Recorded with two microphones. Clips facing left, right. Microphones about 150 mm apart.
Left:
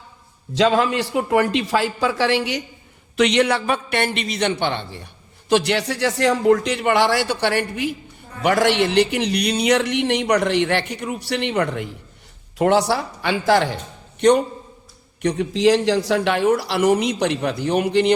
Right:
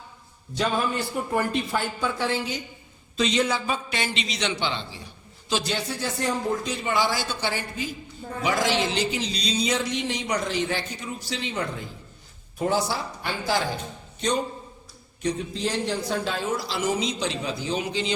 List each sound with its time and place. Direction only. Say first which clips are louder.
0.5 s a man's voice: left 8 dB; 90° left; by 18.1 s 65° left (ahead or behind)